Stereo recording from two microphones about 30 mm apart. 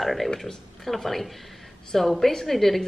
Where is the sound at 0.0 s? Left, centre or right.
Centre.